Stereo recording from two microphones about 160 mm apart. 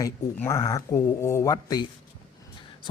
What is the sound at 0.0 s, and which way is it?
Speech, 15° left (ahead or behind).